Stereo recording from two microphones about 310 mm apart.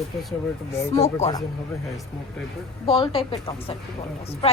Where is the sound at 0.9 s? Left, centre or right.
Centre.